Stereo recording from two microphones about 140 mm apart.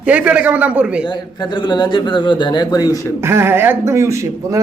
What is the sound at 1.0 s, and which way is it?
Speech, 30° left (ahead or behind).